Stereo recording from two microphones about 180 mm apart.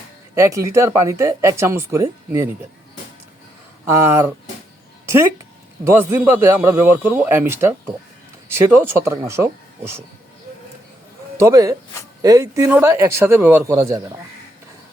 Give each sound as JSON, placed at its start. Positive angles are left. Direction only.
{"t": 0.3, "sound": "speech", "side_deg": -15}
{"t": 3.8, "sound": "speech", "side_deg": -15}
{"t": 5.8, "sound": "speech", "side_deg": -15}
{"t": 11.3, "sound": "speech", "side_deg": -15}